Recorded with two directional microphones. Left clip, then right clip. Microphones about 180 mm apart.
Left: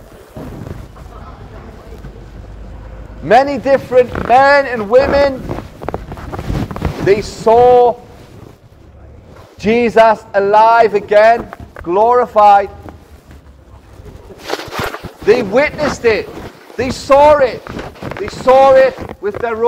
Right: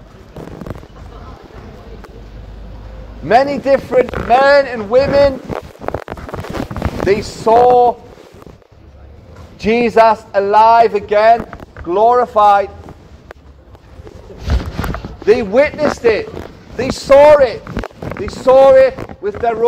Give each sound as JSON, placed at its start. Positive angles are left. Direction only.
{"t": 3.3, "sound": "a man's voice", "side_deg": 40}
{"t": 7.1, "sound": "speech", "side_deg": 45}
{"t": 9.6, "sound": "a man's voice", "side_deg": 40}
{"t": 15.2, "sound": "a man's voice", "side_deg": 40}